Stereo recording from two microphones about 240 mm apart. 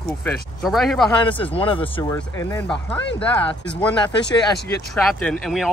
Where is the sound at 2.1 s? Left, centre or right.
Centre.